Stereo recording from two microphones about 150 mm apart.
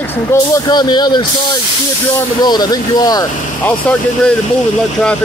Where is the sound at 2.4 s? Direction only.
25° left (ahead or behind).